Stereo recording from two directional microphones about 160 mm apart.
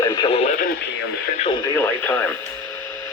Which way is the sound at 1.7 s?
10° left (ahead or behind).